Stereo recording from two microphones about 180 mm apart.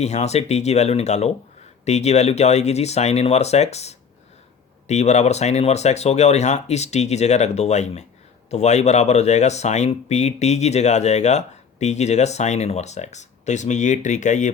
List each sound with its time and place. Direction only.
0.0 s speech: 35° left (ahead or behind)